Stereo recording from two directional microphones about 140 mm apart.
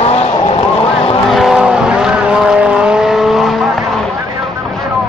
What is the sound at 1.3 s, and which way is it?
Vehicle, centre (ahead or behind).